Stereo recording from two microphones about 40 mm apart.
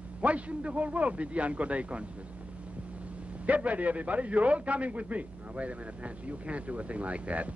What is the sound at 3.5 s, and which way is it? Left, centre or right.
A man's voice, right.